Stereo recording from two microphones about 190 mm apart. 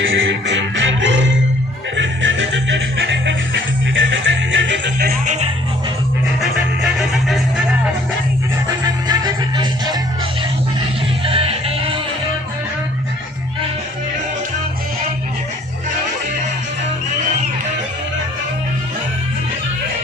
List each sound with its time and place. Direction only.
0.0 s music: 90° right; by 5.1 s 65° right (ahead or behind)
6.4 s music: centre (ahead or behind)
8.6 s music: 20° right (ahead or behind)
11.3 s music: 30° right (ahead or behind)